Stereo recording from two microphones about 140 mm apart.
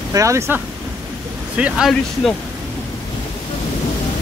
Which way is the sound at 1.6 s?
Centre (ahead or behind).